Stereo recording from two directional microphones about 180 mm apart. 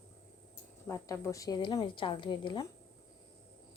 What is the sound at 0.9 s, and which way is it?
A woman's voice, 15° left (ahead or behind).